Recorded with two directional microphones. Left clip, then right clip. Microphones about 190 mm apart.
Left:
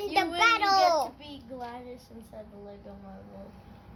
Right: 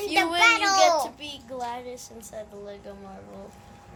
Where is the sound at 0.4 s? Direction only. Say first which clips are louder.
Right 3 dB; 20° left (ahead or behind).